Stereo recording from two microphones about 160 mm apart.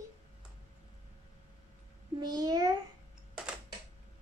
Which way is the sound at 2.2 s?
25° right (ahead or behind).